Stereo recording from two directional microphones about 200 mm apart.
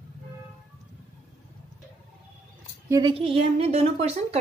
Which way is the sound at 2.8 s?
20° right (ahead or behind).